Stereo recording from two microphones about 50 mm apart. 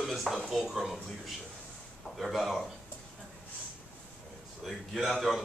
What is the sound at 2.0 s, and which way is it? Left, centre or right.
Speech, centre.